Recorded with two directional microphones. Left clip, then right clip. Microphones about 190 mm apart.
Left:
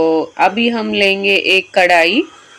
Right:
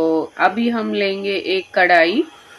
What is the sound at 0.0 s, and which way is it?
Speech, 15° left (ahead or behind).